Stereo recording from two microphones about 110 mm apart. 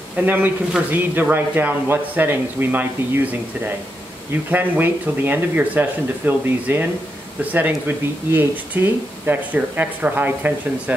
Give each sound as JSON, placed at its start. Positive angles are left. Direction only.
{"t": 0.2, "sound": "speech", "side_deg": -15}
{"t": 8.3, "sound": "speech", "side_deg": -20}